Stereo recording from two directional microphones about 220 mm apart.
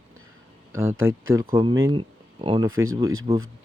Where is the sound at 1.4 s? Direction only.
20° right (ahead or behind).